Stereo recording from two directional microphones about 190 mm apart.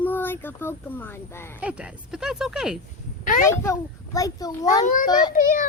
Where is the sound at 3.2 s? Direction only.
45° left (ahead or behind).